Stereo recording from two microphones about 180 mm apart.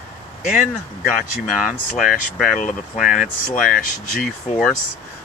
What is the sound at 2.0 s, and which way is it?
Speech, centre (ahead or behind).